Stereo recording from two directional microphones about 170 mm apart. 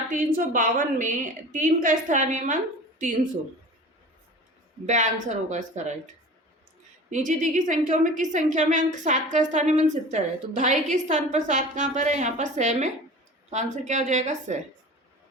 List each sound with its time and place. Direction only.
0.3 s a woman's voice: 50° right (ahead or behind)
4.9 s a woman's voice: 45° right (ahead or behind)
7.1 s a woman's voice: 50° right (ahead or behind)